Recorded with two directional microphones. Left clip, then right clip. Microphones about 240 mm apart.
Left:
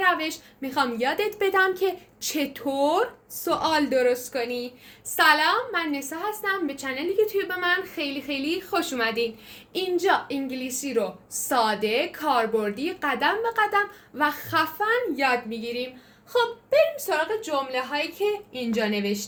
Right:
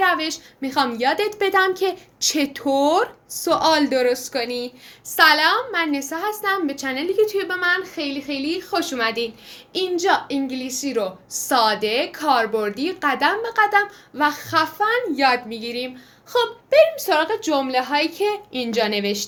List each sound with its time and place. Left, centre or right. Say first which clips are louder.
0.0 s a woman's voice: right 4 dB; centre; by 19.2 s right